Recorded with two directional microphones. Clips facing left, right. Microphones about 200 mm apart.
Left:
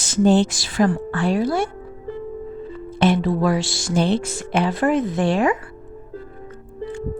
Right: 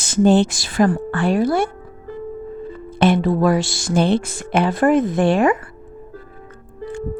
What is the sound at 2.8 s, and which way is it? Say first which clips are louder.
Speech: right 2 dB; 55° right (ahead or behind).